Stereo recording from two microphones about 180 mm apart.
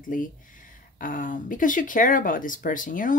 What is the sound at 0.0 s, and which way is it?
Speech, 45° left (ahead or behind).